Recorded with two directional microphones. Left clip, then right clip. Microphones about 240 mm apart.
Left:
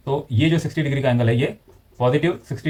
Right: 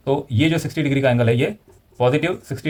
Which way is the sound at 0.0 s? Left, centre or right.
Right.